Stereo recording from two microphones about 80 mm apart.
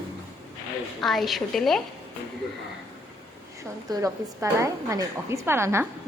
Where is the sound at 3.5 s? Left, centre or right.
Right.